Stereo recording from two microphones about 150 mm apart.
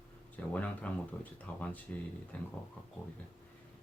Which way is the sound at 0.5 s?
10° left (ahead or behind).